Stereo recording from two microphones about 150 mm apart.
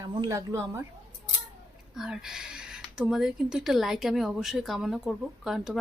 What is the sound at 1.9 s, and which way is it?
Speech, 5° right (ahead or behind).